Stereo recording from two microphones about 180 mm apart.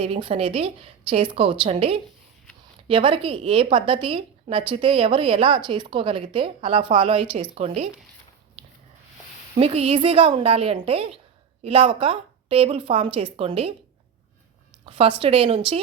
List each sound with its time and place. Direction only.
0.0 s a woman's voice: 30° right (ahead or behind)
9.6 s a woman's voice: 35° right (ahead or behind)
14.8 s a woman's voice: 30° right (ahead or behind)